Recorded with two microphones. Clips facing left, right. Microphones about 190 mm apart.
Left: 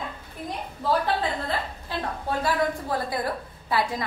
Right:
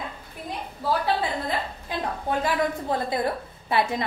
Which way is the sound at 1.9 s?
15° right (ahead or behind).